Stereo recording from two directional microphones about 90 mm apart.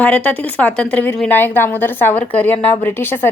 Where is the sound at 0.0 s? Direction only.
15° left (ahead or behind).